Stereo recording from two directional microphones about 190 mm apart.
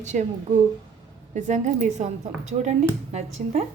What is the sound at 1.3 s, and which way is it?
A woman's voice, 40° right (ahead or behind).